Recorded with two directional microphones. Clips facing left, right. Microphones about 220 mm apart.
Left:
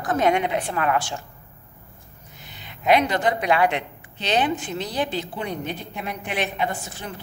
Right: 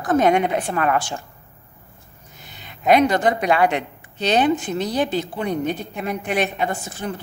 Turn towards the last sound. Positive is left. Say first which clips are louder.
# right 3 dB
turn(degrees=-45)  # may be behind; listen again after turning